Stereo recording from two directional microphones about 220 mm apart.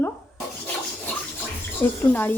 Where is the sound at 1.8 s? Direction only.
10° left (ahead or behind).